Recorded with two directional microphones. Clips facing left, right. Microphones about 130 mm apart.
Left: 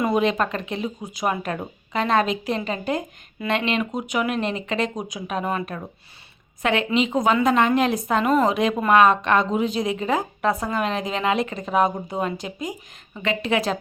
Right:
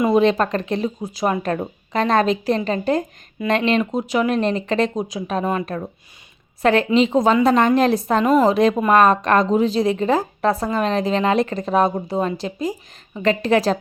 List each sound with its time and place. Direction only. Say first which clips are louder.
0.0 s a woman's voice: right 5 dB; 30° right (ahead or behind)